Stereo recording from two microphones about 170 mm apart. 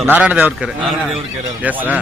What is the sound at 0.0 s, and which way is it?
A man's voice, 10° right (ahead or behind).